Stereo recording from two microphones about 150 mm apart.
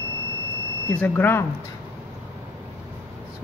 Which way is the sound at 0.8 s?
10° left (ahead or behind).